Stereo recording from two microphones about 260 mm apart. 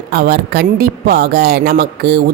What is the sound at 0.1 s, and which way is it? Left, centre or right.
Speech, right.